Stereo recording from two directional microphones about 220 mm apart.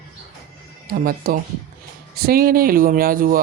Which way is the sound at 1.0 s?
40° right (ahead or behind).